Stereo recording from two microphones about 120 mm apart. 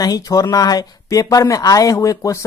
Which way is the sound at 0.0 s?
30° left (ahead or behind).